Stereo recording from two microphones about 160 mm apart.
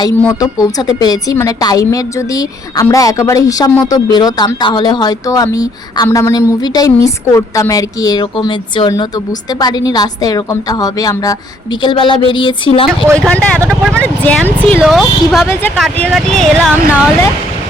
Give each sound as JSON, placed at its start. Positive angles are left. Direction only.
{"t": 0.0, "sound": "a woman's voice", "side_deg": 20}
{"t": 13.1, "sound": "speech", "side_deg": 5}
{"t": 14.8, "sound": "speech", "side_deg": -5}
{"t": 15.4, "sound": "speech", "side_deg": 10}